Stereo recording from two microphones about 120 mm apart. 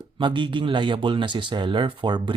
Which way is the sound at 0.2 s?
40° right (ahead or behind).